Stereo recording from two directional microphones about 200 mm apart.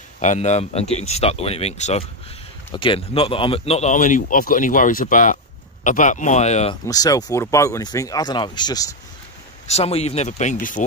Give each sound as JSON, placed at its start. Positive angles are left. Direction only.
{"t": 0.2, "sound": "speech", "side_deg": 35}
{"t": 6.9, "sound": "speech", "side_deg": 20}
{"t": 9.7, "sound": "speech", "side_deg": 30}